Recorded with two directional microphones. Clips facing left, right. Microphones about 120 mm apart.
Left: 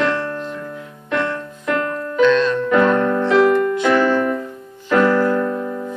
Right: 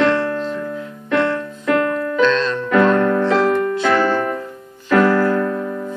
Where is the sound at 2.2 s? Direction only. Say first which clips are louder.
Left 4 dB; 10° left (ahead or behind).